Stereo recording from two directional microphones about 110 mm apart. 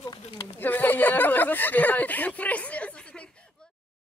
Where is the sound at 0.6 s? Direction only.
15° left (ahead or behind).